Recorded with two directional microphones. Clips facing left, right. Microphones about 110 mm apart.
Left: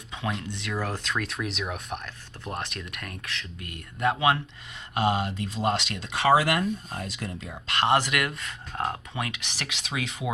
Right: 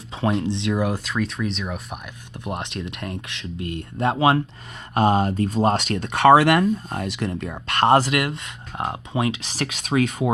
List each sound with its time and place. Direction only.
0.1 s speech: 30° right (ahead or behind); by 2.0 s centre (ahead or behind)
2.4 s speech: 20° right (ahead or behind)
4.9 s speech: 45° right (ahead or behind)